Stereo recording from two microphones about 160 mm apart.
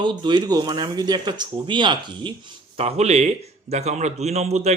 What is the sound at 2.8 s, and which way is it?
Speech, 40° right (ahead or behind).